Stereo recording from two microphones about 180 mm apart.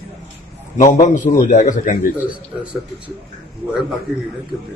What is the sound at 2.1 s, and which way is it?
Speech, 5° right (ahead or behind).